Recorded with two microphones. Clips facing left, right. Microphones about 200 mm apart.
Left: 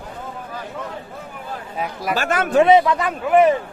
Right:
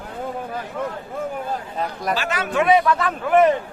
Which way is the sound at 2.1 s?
50° left (ahead or behind).